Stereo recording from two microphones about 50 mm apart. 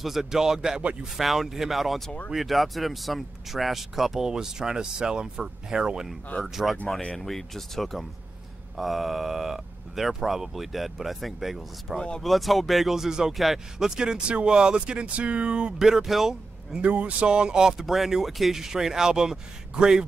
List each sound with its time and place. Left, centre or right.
0.0 s speech: centre
6.4 s speech: centre
15.8 s speech: centre
16.8 s speech: right
17.7 s speech: centre